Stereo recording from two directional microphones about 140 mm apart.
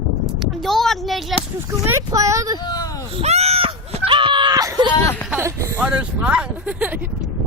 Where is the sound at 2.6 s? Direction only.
30° left (ahead or behind).